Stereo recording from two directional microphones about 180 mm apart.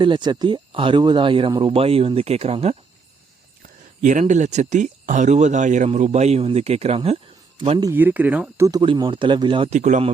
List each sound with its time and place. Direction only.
0.0 s speech: 25° right (ahead or behind)
4.0 s speech: 40° right (ahead or behind)
7.8 s speech: 15° right (ahead or behind)
9.7 s speech: 40° right (ahead or behind)